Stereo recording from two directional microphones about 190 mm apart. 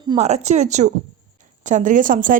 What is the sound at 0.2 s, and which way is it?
Speech, 35° right (ahead or behind).